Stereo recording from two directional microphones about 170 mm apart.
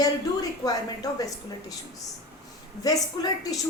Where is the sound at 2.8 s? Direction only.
20° left (ahead or behind).